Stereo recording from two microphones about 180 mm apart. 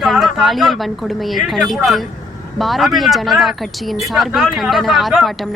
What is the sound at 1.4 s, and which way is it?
Speech, centre (ahead or behind).